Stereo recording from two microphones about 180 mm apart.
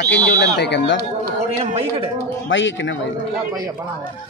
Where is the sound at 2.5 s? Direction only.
90° left.